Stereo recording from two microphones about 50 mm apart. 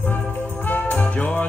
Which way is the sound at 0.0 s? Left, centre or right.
Left.